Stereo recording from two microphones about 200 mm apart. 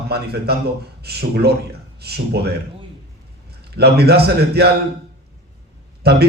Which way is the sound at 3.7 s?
55° right (ahead or behind).